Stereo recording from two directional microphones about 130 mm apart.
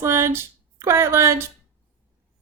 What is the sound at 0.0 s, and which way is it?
Speech, 20° right (ahead or behind).